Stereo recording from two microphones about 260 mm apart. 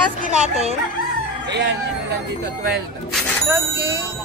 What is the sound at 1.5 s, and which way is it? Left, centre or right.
Speech, right.